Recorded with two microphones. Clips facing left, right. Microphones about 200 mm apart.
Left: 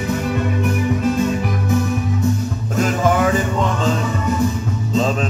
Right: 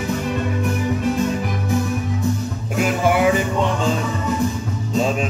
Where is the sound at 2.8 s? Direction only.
10° right (ahead or behind).